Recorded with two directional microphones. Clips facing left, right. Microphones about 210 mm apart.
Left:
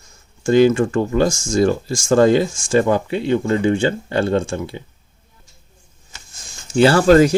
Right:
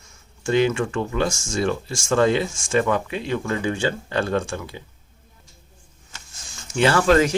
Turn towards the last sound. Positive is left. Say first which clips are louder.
# left 6 dB
turn(degrees=40)  # may be behind; listen again after turning